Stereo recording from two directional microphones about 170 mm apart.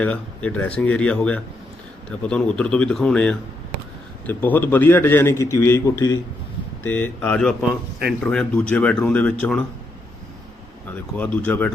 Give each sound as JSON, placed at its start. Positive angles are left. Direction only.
{"t": 0.0, "sound": "a man's voice", "side_deg": 10}
{"t": 10.8, "sound": "a man's voice", "side_deg": 10}